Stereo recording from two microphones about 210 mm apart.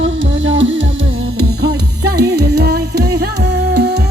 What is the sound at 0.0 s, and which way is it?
Music, 65° right (ahead or behind).